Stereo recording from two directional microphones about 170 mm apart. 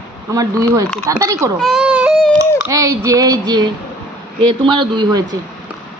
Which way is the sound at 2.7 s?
20° right (ahead or behind).